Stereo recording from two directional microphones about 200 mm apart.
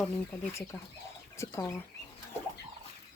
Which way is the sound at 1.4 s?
15° left (ahead or behind).